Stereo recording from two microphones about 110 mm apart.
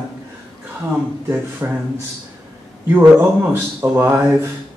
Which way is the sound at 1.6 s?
25° right (ahead or behind).